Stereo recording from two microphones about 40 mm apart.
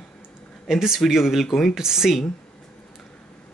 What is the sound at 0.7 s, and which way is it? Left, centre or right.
Speech, centre.